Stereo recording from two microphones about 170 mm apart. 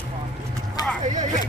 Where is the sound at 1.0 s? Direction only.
45° right (ahead or behind).